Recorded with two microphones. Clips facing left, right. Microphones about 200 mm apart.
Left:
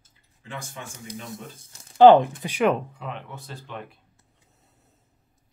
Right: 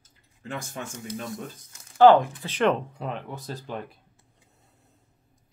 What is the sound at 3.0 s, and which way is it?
Speech, 40° right (ahead or behind).